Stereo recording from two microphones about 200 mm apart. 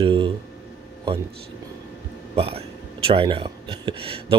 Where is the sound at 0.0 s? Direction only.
25° right (ahead or behind).